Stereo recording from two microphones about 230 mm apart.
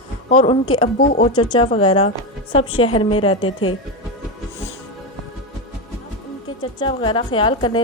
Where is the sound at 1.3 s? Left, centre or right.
Left.